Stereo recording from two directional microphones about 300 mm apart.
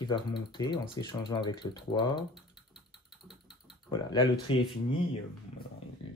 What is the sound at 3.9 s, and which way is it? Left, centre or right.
Speech, centre.